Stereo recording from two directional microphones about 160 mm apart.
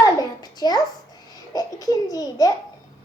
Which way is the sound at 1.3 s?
25° left (ahead or behind).